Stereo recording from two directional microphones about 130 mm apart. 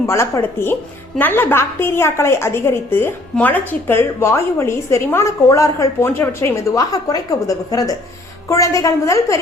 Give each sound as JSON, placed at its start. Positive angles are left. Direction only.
{"t": 0.1, "sound": "a woman's voice", "side_deg": 20}